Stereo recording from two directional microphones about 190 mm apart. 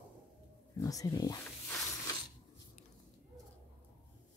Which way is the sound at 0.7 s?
20° left (ahead or behind).